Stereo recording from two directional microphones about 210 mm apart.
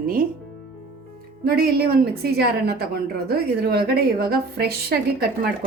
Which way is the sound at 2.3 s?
50° right (ahead or behind).